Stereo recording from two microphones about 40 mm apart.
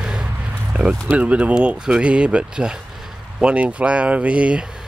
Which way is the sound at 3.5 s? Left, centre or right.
Right.